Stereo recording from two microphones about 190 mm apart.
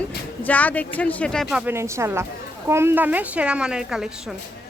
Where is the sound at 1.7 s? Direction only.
15° right (ahead or behind).